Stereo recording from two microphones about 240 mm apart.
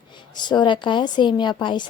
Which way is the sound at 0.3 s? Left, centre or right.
Centre.